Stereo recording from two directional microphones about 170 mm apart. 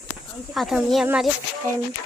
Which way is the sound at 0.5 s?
Centre (ahead or behind).